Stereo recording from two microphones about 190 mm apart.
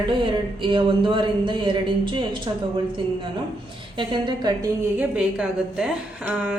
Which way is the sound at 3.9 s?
25° right (ahead or behind).